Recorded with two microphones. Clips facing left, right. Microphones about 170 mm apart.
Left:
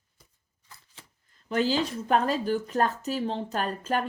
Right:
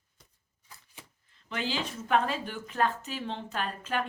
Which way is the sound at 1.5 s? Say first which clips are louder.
Left 8 dB; 40° left (ahead or behind).